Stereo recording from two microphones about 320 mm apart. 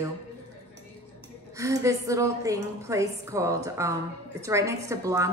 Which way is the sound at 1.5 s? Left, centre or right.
Centre.